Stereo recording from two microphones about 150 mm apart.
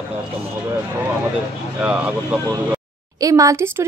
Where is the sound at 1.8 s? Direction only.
10° right (ahead or behind).